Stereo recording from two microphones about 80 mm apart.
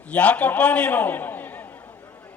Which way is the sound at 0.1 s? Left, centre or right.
Centre.